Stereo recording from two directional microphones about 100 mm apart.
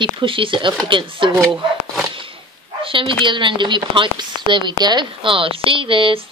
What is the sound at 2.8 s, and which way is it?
Speech, 60° right (ahead or behind).